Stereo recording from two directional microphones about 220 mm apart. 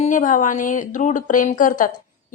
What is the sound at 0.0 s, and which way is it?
A woman's voice, 35° left (ahead or behind).